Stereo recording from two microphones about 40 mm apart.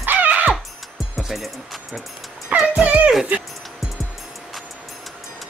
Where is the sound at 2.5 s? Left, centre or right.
Right.